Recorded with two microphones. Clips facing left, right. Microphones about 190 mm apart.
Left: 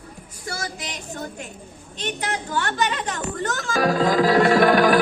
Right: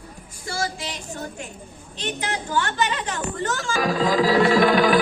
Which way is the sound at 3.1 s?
40° left (ahead or behind).